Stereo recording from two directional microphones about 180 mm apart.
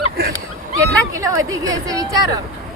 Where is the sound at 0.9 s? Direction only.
20° right (ahead or behind).